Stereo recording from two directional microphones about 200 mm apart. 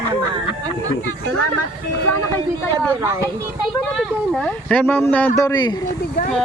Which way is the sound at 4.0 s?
5° left (ahead or behind).